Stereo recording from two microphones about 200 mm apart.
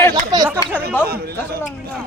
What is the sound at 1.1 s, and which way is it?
Speech, 50° right (ahead or behind).